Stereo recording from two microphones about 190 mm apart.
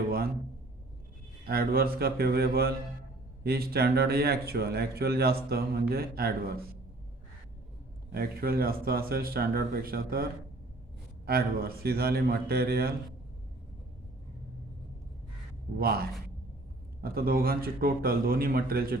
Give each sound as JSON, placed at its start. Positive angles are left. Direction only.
{"t": 1.5, "sound": "speech", "side_deg": -50}
{"t": 8.1, "sound": "speech", "side_deg": -50}
{"t": 11.3, "sound": "speech", "side_deg": -55}
{"t": 15.8, "sound": "speech", "side_deg": -55}